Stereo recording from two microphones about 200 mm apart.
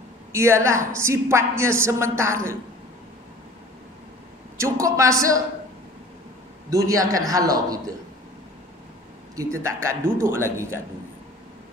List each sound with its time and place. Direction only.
0.3 s a woman's voice: 15° right (ahead or behind)
4.6 s a woman's voice: 15° right (ahead or behind)
6.7 s a woman's voice: 15° right (ahead or behind)
9.3 s a woman's voice: 15° right (ahead or behind)